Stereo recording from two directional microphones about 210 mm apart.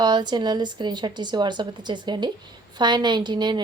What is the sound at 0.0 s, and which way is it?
A woman's voice, 20° right (ahead or behind).